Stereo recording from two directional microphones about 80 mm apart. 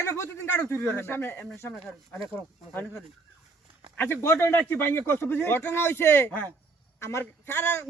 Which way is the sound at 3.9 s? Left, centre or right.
Left.